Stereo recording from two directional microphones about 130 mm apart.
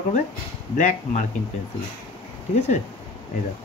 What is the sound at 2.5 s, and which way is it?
Speech, 65° left (ahead or behind).